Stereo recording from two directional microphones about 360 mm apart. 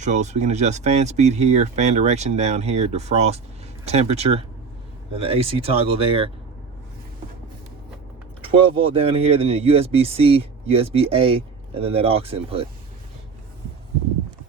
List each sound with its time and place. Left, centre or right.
0.0 s speech: centre
8.4 s speech: centre